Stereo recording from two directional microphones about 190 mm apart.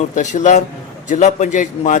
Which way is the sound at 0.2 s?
40° left (ahead or behind).